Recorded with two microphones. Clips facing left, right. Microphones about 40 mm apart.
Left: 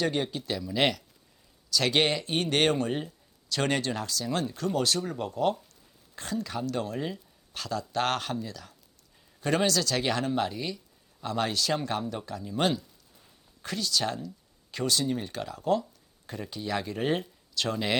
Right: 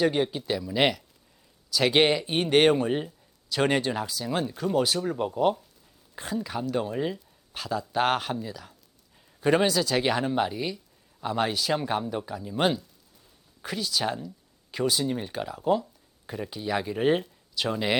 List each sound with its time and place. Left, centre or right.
0.0 s speech: centre